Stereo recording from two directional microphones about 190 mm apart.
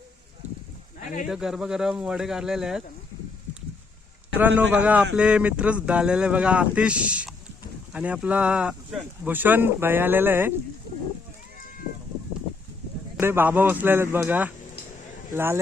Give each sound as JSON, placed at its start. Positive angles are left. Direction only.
{"t": 1.3, "sound": "speech", "side_deg": -5}
{"t": 4.4, "sound": "speech", "side_deg": -10}
{"t": 13.1, "sound": "speech", "side_deg": -10}